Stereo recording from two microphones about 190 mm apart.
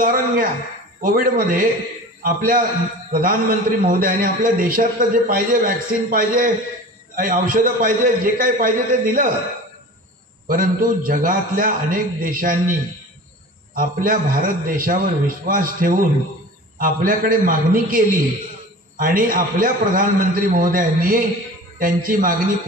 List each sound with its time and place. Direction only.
0.0 s a man's voice: 50° right (ahead or behind)
10.5 s a man's voice: 45° right (ahead or behind)
13.7 s a man's voice: 45° right (ahead or behind)